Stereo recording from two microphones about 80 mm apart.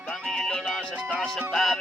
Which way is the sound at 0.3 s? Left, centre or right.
Centre.